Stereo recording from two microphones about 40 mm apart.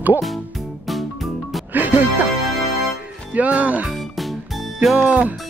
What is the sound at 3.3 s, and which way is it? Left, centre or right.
Speech, right.